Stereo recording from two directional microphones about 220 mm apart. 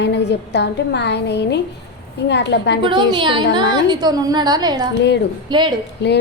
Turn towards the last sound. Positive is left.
turn(degrees=50)  # may be behind; listen again after turning